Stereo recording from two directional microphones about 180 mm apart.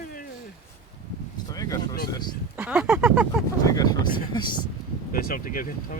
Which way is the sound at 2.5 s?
5° right (ahead or behind).